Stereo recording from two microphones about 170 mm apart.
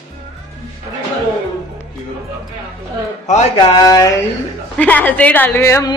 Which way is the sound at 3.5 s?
25° left (ahead or behind).